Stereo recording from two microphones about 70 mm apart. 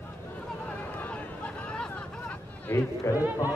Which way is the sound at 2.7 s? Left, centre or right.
Left.